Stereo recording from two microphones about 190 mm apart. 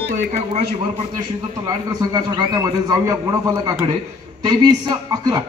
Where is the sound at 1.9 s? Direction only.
20° right (ahead or behind).